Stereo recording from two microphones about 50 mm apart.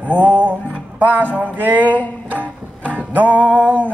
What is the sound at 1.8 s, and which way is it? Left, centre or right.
Music, left.